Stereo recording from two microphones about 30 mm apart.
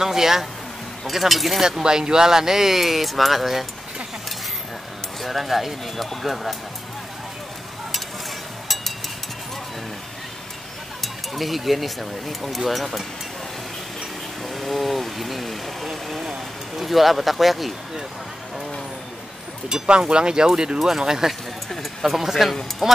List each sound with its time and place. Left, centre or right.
0.0 s speech: centre
1.0 s speech: centre
1.8 s speech: right; by 3.6 s centre
5.2 s speech: centre
11.0 s speech: centre
14.5 s speech: centre
19.7 s speech: right
22.0 s speech: centre